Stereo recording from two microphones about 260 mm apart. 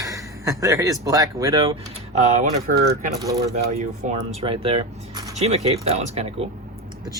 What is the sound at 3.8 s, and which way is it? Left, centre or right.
Speech, right.